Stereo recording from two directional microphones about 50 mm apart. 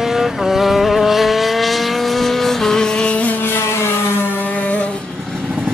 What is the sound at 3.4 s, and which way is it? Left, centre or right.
Vehicle, left.